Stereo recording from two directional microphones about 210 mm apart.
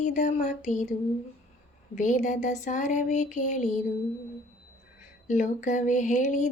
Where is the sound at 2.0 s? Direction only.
35° left (ahead or behind).